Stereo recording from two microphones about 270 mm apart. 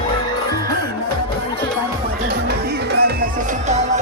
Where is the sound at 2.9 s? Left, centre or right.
Right.